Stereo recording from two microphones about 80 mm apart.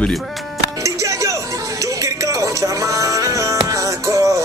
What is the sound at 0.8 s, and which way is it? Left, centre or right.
Music, right.